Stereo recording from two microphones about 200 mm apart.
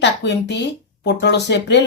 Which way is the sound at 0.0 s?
60° left (ahead or behind).